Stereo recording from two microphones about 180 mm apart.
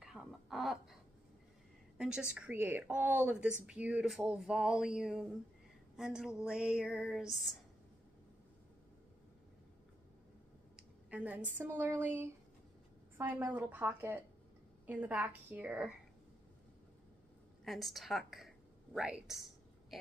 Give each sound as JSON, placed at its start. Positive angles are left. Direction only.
{"t": 0.0, "sound": "a sound", "side_deg": 0}
{"t": 2.0, "sound": "a woman's voice", "side_deg": -5}
{"t": 10.8, "sound": "a sound", "side_deg": -5}
{"t": 11.5, "sound": "a woman's voice", "side_deg": -10}
{"t": 13.2, "sound": "a woman's voice", "side_deg": -10}
{"t": 17.6, "sound": "speech", "side_deg": 0}